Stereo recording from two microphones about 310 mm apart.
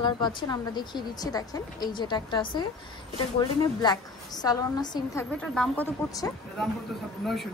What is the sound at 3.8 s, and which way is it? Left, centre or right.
A woman's voice, centre.